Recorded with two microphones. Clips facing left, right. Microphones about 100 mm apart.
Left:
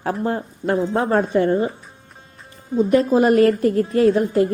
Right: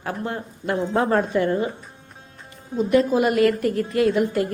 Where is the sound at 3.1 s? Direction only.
40° left (ahead or behind).